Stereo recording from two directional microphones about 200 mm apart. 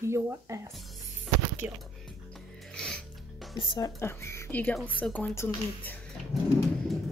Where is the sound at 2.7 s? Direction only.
5° left (ahead or behind).